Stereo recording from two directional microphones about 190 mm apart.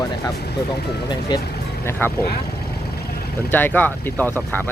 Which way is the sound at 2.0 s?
10° left (ahead or behind).